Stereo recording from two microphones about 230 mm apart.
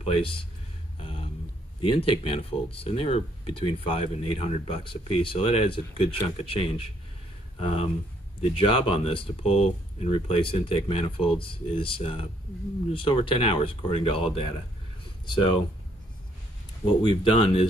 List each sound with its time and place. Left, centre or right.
0.9 s a sound: left
1.8 s speech: left
17.0 s speech: left